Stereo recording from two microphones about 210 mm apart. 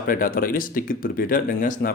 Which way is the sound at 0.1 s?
40° left (ahead or behind).